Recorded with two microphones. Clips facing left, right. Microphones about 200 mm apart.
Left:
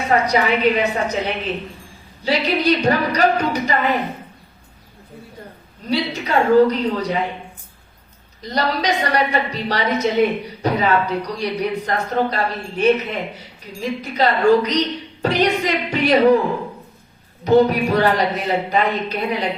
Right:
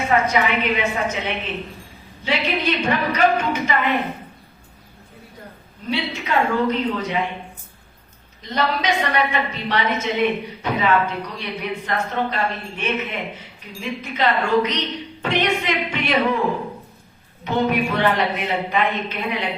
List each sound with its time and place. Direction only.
0.1 s a woman's voice: 35° left (ahead or behind)
2.2 s a woman's voice: 40° left (ahead or behind)
5.9 s a woman's voice: 35° left (ahead or behind)
8.4 s a woman's voice: 35° left (ahead or behind)
17.4 s a woman's voice: 35° left (ahead or behind)